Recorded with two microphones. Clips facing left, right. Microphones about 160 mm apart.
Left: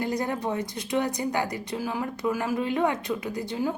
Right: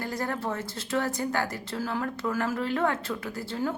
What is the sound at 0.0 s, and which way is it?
A woman's voice, 20° left (ahead or behind).